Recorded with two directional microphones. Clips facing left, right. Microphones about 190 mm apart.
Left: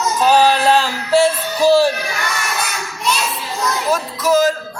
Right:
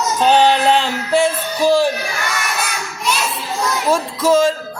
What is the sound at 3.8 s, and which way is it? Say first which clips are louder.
Music: right 3 dB; 30° right (ahead or behind).